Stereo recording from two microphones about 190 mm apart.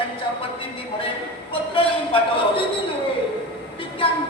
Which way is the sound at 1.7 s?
30° left (ahead or behind).